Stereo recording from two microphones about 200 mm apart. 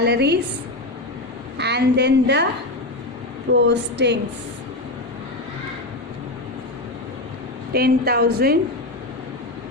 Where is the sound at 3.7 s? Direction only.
60° right (ahead or behind).